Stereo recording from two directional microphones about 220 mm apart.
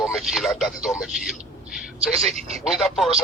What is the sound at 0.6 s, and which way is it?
Speech, centre (ahead or behind).